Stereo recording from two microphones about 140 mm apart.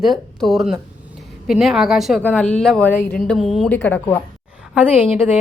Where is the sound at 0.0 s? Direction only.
Centre (ahead or behind).